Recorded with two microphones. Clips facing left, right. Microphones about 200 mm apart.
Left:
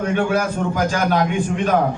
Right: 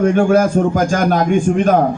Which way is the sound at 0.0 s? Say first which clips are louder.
Right 7 dB; 45° right (ahead or behind).